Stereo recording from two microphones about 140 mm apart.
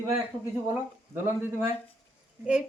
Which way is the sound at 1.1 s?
15° right (ahead or behind).